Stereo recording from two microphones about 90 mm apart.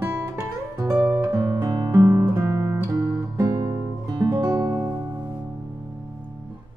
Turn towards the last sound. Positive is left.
turn(degrees=-30)  # may be behind; listen again after turning